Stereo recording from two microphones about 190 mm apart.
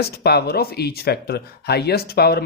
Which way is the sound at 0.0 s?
60° left (ahead or behind).